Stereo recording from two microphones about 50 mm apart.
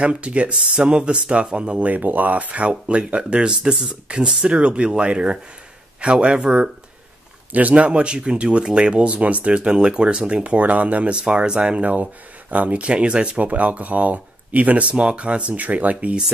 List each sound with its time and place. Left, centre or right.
0.0 s speech: right